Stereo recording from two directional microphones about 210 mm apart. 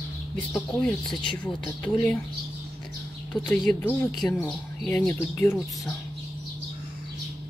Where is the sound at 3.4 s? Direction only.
5° left (ahead or behind).